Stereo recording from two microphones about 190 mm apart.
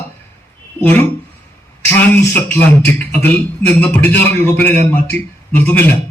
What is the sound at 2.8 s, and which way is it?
A man's voice, 10° left (ahead or behind).